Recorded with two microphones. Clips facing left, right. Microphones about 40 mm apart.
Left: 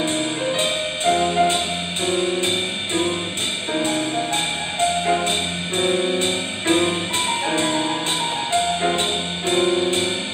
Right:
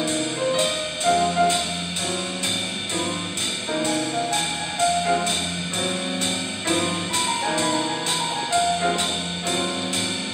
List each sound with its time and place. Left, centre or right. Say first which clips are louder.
0.0 s music: left 2 dB; left
4.7 s music: left 1 dB; left
9.5 s music: left 8 dB; left